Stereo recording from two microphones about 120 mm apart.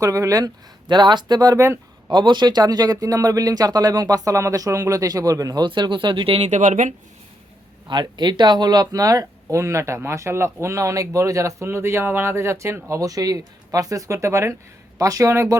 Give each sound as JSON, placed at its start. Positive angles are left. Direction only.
{"t": 0.0, "sound": "speech", "side_deg": -30}
{"t": 2.0, "sound": "speech", "side_deg": -40}
{"t": 6.4, "sound": "speech", "side_deg": -85}
{"t": 7.9, "sound": "speech", "side_deg": -40}